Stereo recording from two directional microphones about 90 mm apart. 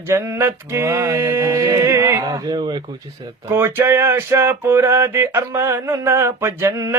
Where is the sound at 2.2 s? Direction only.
45° right (ahead or behind).